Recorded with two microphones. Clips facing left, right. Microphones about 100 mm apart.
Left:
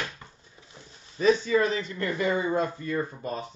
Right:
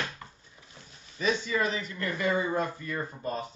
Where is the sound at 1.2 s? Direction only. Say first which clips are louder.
Left 6 dB; 35° left (ahead or behind).